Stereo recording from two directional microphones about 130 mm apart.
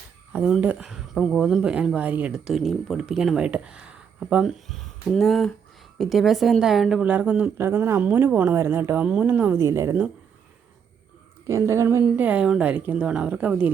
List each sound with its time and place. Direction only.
0.3 s a woman's voice: 10° right (ahead or behind)
11.4 s a woman's voice: 20° right (ahead or behind)